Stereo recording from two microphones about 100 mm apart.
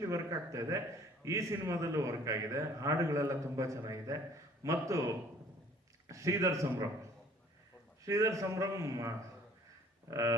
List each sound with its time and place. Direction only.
0.0 s a man's voice: 30° right (ahead or behind)